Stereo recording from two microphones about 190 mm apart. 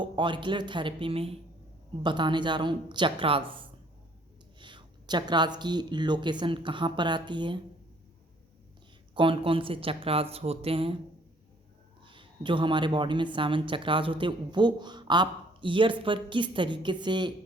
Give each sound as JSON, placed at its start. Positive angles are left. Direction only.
{"t": 0.0, "sound": "a woman's voice", "side_deg": -25}
{"t": 9.1, "sound": "a woman's voice", "side_deg": -25}
{"t": 10.3, "sound": "a sound", "side_deg": -30}
{"t": 12.0, "sound": "a woman's voice", "side_deg": -25}